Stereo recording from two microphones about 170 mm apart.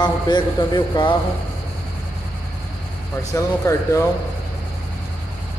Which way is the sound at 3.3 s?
20° left (ahead or behind).